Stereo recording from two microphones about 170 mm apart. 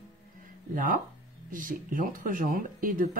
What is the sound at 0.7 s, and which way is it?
Speech, 55° right (ahead or behind).